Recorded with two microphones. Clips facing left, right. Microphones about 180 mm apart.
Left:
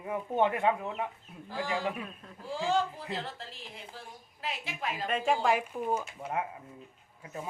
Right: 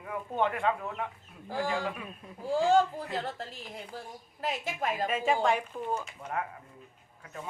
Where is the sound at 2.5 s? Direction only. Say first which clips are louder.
Right 6 dB; 45° right (ahead or behind).